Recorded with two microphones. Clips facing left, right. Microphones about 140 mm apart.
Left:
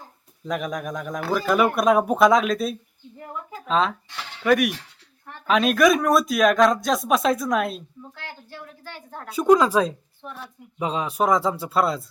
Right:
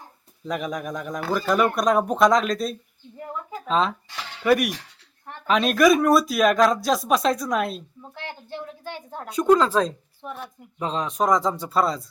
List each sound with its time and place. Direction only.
0.4 s speech: centre (ahead or behind)
8.1 s a woman's voice: 20° right (ahead or behind)
9.3 s speech: 10° left (ahead or behind)
10.2 s a woman's voice: 10° right (ahead or behind)
10.8 s speech: 10° left (ahead or behind)